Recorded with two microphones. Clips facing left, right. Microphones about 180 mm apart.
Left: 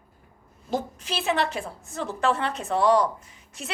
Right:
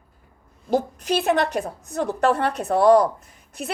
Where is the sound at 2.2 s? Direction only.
60° right (ahead or behind).